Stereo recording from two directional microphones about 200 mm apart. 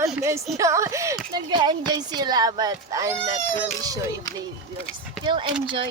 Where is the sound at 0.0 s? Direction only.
15° right (ahead or behind).